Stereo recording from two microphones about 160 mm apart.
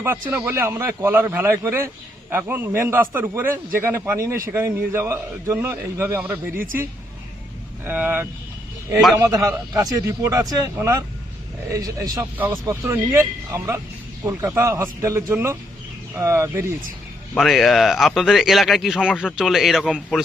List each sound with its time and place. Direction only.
0.0 s a man's voice: 15° right (ahead or behind)
7.9 s a man's voice: 10° right (ahead or behind)
17.3 s speech: centre (ahead or behind)